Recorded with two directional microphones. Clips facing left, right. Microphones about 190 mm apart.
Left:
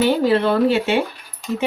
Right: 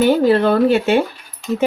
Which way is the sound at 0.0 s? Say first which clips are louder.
Right 3 dB; 50° right (ahead or behind).